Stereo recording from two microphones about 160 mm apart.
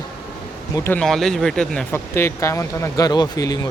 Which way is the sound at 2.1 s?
15° left (ahead or behind).